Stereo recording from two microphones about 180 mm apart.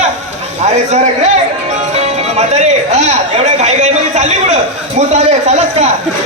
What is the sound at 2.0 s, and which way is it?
A man's voice, 40° right (ahead or behind).